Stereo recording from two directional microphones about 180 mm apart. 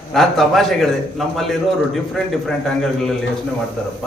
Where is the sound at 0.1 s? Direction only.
Centre (ahead or behind).